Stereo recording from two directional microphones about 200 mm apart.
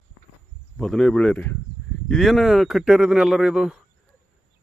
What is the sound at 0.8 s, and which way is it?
A man's voice, centre (ahead or behind).